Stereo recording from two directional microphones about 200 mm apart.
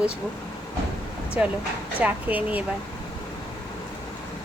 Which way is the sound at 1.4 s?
10° right (ahead or behind).